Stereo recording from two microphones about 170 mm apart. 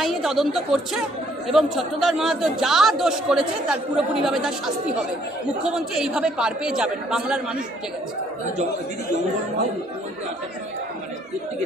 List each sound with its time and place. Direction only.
0.0 s a man's voice: centre (ahead or behind)